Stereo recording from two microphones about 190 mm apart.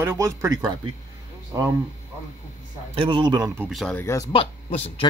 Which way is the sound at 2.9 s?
25° right (ahead or behind).